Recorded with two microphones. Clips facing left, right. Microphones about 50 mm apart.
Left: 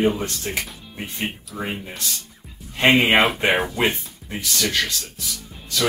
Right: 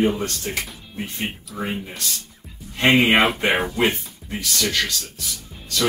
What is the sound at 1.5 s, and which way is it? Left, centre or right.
Speech, centre.